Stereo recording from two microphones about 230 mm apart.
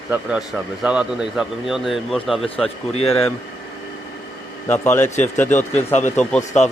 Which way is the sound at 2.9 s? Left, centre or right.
Left.